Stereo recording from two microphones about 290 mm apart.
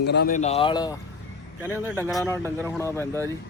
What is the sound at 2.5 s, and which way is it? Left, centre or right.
Speech, centre.